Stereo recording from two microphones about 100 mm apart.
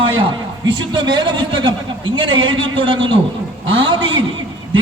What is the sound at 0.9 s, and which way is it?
A man's voice, 50° right (ahead or behind).